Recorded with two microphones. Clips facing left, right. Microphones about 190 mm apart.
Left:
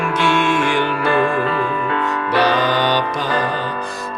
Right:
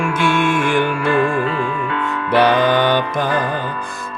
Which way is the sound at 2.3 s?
55° right (ahead or behind).